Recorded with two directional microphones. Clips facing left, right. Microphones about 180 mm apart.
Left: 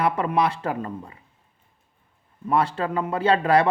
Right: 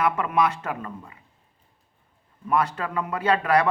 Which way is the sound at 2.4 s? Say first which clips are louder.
Left 2 dB; 30° left (ahead or behind).